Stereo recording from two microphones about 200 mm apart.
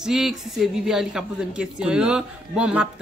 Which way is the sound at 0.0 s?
Centre (ahead or behind).